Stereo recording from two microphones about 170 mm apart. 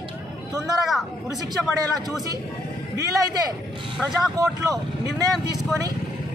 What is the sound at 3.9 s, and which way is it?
Speech, 5° right (ahead or behind).